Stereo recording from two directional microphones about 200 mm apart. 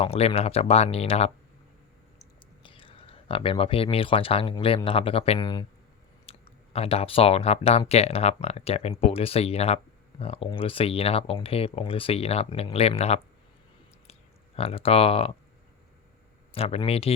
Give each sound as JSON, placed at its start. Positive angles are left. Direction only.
{"t": 0.0, "sound": "speech", "side_deg": 30}
{"t": 2.6, "sound": "speech", "side_deg": 25}
{"t": 16.5, "sound": "speech", "side_deg": 30}